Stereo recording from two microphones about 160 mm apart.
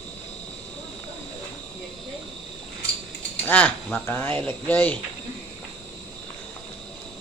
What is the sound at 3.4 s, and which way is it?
Speech, 10° left (ahead or behind).